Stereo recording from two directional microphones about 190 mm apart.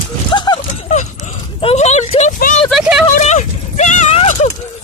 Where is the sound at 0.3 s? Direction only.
25° left (ahead or behind).